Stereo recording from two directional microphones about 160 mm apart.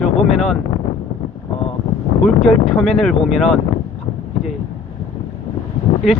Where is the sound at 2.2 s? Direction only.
Centre (ahead or behind).